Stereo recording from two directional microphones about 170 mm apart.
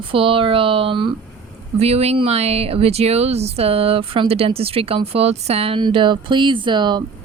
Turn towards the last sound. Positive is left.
turn(degrees=-25)  # may be behind; listen again after turning